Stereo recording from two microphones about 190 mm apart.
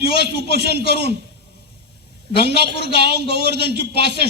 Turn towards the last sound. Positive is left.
turn(degrees=-60)  # may be behind; listen again after turning